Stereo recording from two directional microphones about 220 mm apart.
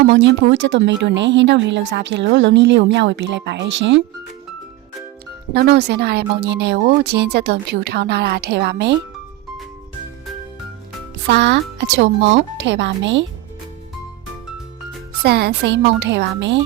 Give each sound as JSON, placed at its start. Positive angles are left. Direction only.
{"t": 0.1, "sound": "speech", "side_deg": -55}
{"t": 5.5, "sound": "speech", "side_deg": -45}
{"t": 11.3, "sound": "speech", "side_deg": -55}
{"t": 15.2, "sound": "speech", "side_deg": -45}